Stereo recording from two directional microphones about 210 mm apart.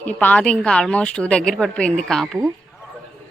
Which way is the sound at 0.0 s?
5° left (ahead or behind).